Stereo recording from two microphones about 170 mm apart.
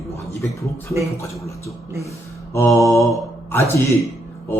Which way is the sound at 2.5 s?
15° left (ahead or behind).